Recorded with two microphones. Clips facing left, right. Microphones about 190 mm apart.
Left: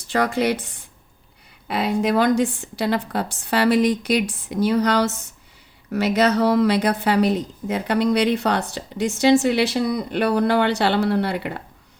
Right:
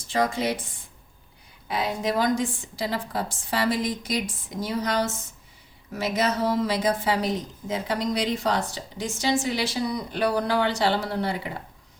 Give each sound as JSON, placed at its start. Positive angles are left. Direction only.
{"t": 0.1, "sound": "a woman's voice", "side_deg": 70}